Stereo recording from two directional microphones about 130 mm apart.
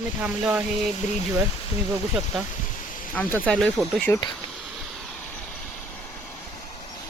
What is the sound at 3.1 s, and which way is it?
Speech, 15° left (ahead or behind).